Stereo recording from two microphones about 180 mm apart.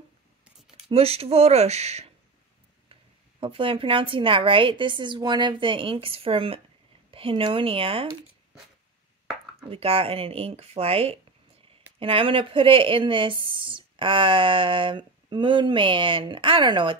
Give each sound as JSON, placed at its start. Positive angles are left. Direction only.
{"t": 0.8, "sound": "speech", "side_deg": -35}
{"t": 9.6, "sound": "speech", "side_deg": -30}